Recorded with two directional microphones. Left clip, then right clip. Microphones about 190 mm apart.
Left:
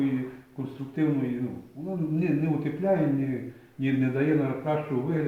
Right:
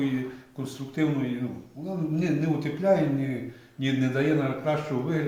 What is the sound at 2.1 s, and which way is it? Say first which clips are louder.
A man's voice: even; 15° right (ahead or behind).